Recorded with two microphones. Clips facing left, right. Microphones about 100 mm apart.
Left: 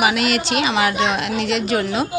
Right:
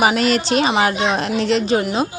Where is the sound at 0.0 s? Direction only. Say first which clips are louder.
Right 2 dB; 35° right (ahead or behind).